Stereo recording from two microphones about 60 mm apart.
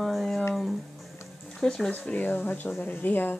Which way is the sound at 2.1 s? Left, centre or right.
Left.